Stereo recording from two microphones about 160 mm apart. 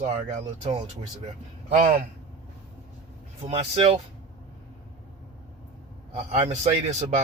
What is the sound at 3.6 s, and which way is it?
Speech, 40° right (ahead or behind).